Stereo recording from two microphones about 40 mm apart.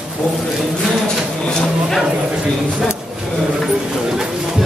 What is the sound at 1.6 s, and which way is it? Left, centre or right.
Speech, centre.